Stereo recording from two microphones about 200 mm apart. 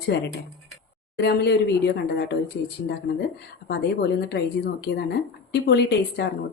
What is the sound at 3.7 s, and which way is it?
Speech, 55° left (ahead or behind).